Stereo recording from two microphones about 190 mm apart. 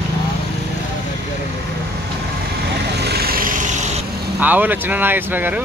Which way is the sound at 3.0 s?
55° right (ahead or behind).